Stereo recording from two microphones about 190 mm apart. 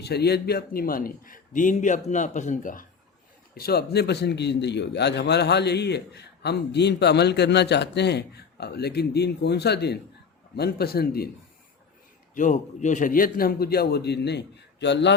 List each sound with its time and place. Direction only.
0.0 s speech: 60° left (ahead or behind); by 2.8 s 40° left (ahead or behind)
3.5 s a man's voice: 55° left (ahead or behind)
12.3 s a man's voice: 40° left (ahead or behind); by 15.1 s 65° left (ahead or behind)